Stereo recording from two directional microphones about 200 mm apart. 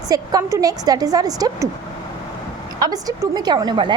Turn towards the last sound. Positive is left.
turn(degrees=-20)  # may be behind; listen again after turning